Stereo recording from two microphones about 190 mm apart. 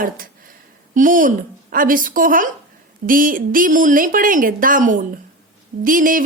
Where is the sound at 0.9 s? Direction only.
45° right (ahead or behind).